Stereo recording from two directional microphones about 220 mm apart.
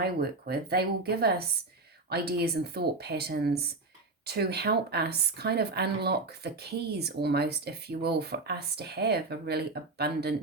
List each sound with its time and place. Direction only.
0.0 s a woman's voice: 45° right (ahead or behind)